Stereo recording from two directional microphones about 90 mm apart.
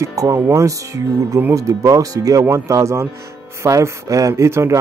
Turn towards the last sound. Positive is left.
turn(degrees=-30)  # may be behind; listen again after turning